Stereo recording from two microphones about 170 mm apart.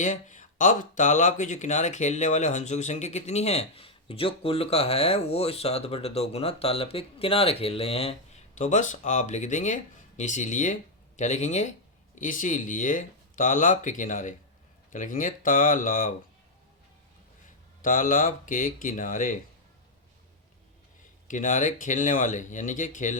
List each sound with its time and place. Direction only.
0.0 s speech: 45° left (ahead or behind)
8.5 s speech: 45° left (ahead or behind)
17.8 s speech: 50° left (ahead or behind)
21.2 s speech: 50° left (ahead or behind)